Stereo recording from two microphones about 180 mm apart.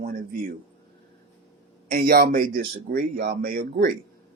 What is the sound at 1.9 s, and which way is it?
Speech, 55° right (ahead or behind).